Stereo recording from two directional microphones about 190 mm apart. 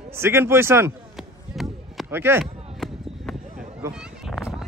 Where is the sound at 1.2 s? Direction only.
Centre (ahead or behind).